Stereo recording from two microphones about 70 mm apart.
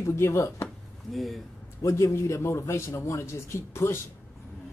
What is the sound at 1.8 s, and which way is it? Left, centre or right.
A man's voice, left.